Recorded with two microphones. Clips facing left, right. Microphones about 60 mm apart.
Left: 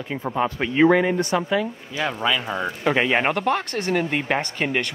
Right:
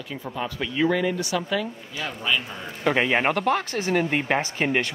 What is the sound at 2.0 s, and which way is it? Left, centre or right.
Speech, left.